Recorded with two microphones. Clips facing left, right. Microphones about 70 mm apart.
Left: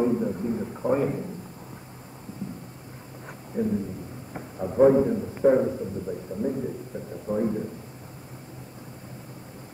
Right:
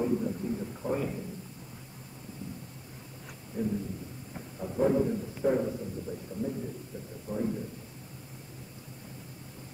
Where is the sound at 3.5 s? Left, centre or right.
Left.